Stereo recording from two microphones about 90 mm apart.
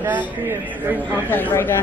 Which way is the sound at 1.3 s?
20° left (ahead or behind).